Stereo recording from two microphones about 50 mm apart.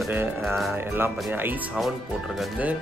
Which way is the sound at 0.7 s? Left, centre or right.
Right.